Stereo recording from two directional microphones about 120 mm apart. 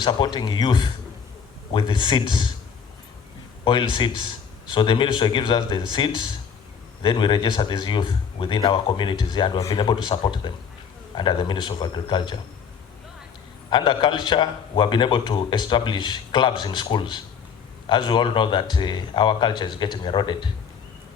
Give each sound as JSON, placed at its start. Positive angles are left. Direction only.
{"t": 0.0, "sound": "a man's voice", "side_deg": 40}
{"t": 3.6, "sound": "a man's voice", "side_deg": 40}
{"t": 13.7, "sound": "a man's voice", "side_deg": 40}